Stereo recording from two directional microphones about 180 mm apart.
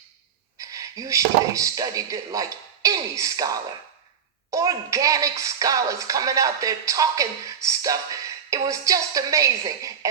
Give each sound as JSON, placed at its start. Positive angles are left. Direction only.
{"t": 0.6, "sound": "speech", "side_deg": -20}